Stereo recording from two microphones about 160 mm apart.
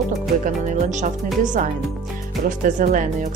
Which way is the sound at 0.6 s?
50° right (ahead or behind).